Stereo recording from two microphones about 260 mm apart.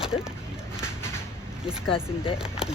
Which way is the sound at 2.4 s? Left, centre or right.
Centre.